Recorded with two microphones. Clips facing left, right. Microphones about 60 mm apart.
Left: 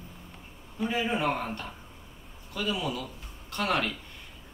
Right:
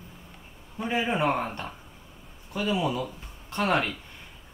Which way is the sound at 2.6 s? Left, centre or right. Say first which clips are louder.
Right 4 dB; right.